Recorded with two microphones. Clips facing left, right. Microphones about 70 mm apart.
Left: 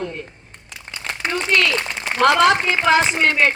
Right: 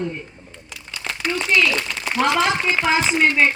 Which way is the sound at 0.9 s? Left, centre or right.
Left.